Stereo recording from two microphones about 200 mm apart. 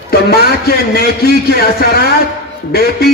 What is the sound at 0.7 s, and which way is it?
Speech, 50° left (ahead or behind).